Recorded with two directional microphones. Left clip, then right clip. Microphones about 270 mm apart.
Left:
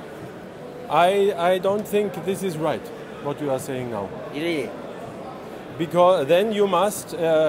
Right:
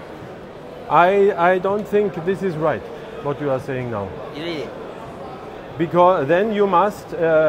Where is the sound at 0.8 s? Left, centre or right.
Centre.